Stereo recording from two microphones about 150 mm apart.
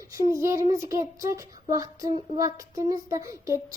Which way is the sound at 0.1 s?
20° right (ahead or behind).